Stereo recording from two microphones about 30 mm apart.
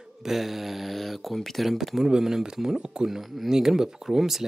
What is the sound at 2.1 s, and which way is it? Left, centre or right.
Speech, centre.